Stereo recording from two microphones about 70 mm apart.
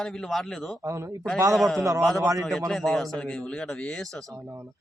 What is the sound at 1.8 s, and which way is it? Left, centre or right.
Speech, right.